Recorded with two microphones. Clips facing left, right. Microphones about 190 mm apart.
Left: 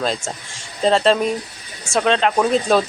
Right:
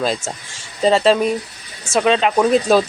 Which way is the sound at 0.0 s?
5° right (ahead or behind).